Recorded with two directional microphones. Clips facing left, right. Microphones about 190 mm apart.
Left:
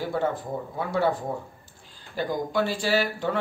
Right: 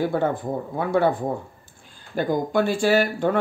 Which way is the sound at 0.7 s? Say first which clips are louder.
Right 4 dB; 55° right (ahead or behind).